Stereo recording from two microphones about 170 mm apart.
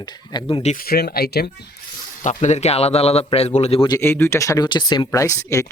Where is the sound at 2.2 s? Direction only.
45° left (ahead or behind).